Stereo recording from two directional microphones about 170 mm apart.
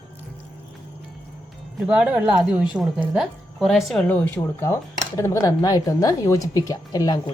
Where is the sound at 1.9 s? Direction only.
5° right (ahead or behind); by 7.3 s 25° left (ahead or behind).